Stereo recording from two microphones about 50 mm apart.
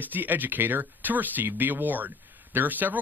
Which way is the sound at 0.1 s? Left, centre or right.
Right.